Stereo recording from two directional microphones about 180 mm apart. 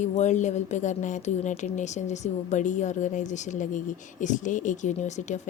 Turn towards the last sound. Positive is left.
turn(degrees=40)  # may be behind; listen again after turning